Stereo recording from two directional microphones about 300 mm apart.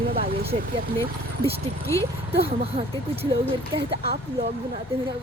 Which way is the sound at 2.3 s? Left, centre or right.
Centre.